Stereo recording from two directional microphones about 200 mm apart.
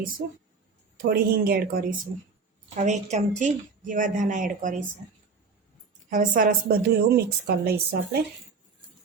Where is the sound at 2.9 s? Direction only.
35° right (ahead or behind).